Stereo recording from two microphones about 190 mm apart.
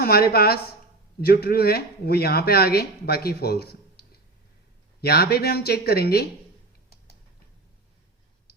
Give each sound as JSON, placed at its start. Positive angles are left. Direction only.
{"t": 0.0, "sound": "speech", "side_deg": 55}